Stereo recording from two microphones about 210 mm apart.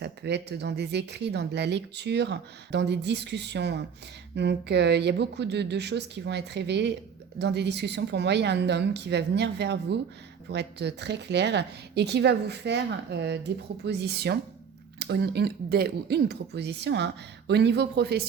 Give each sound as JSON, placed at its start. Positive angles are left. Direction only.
{"t": 0.0, "sound": "speech", "side_deg": -55}